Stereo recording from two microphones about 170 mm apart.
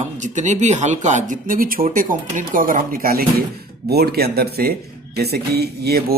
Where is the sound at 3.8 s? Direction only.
70° right (ahead or behind).